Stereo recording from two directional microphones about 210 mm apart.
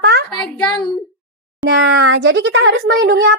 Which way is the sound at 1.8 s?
65° right (ahead or behind).